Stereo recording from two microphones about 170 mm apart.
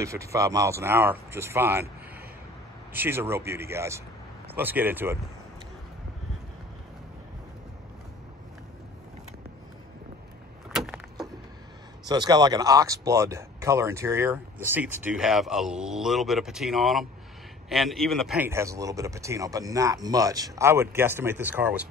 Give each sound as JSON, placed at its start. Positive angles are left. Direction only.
{"t": 0.0, "sound": "speech", "side_deg": -15}
{"t": 2.9, "sound": "speech", "side_deg": -10}
{"t": 10.7, "sound": "vehicle", "side_deg": 0}
{"t": 12.1, "sound": "a man's voice", "side_deg": -25}
{"t": 18.4, "sound": "speech", "side_deg": -15}